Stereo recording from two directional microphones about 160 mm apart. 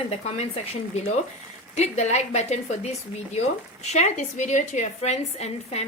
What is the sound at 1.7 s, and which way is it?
A woman's voice, 45° left (ahead or behind).